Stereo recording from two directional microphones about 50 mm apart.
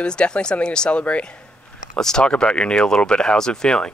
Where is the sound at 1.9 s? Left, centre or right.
Centre.